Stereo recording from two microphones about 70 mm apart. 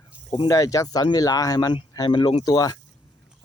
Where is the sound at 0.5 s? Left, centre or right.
Left.